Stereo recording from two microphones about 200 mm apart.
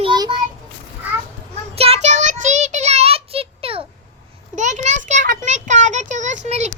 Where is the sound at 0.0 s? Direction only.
25° right (ahead or behind).